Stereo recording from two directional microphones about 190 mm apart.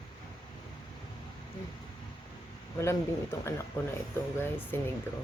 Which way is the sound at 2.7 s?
15° left (ahead or behind).